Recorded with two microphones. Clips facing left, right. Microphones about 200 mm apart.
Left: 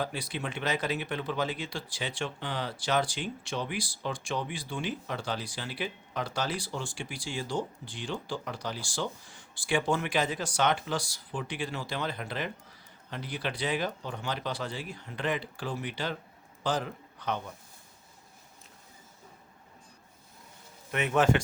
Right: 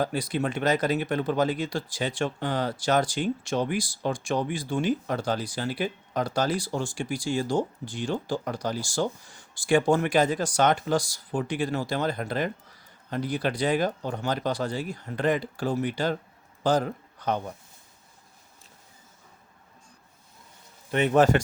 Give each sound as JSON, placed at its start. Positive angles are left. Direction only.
{"t": 0.0, "sound": "a man's voice", "side_deg": -45}
{"t": 20.9, "sound": "speech", "side_deg": -35}